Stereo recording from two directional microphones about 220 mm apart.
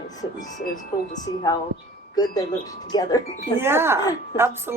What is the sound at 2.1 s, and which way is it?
Speech, 15° left (ahead or behind).